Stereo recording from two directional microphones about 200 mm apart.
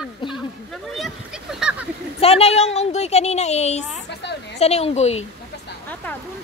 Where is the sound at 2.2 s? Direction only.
30° left (ahead or behind).